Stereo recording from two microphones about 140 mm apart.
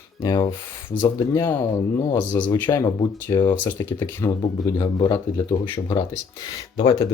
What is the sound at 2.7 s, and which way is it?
Speech, 25° left (ahead or behind).